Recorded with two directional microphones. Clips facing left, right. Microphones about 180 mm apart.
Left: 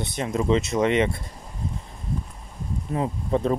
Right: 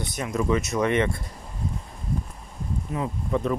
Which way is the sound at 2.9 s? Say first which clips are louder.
Left 3 dB; 35° left (ahead or behind).